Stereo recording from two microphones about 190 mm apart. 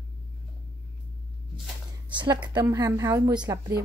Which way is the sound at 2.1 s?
20° right (ahead or behind).